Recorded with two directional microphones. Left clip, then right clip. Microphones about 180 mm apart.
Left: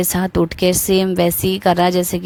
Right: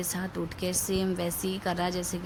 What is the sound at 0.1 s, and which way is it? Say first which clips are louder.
Speech: left 16 dB; 55° left (ahead or behind).